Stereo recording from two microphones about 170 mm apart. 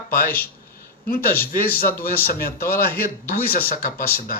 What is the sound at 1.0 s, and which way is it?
Speech, 60° left (ahead or behind).